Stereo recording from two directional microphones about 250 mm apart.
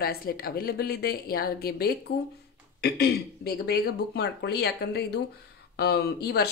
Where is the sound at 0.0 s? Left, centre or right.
Left.